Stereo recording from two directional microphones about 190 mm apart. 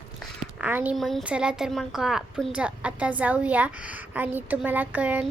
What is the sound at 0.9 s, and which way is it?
Speech, centre (ahead or behind).